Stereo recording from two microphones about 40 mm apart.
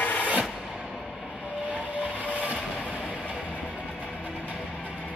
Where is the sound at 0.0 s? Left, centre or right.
Left.